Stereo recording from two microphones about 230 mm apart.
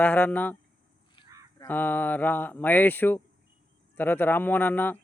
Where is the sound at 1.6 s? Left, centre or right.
Centre.